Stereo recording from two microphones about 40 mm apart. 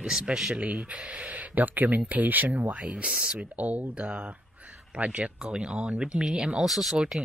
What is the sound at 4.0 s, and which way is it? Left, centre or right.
Speech, right.